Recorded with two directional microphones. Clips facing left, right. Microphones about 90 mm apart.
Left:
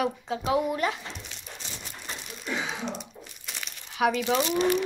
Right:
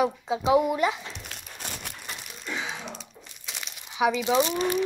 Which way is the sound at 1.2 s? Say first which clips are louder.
Right 3 dB; 55° right (ahead or behind).